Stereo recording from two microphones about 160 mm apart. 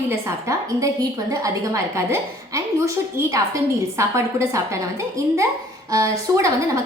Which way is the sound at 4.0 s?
20° right (ahead or behind).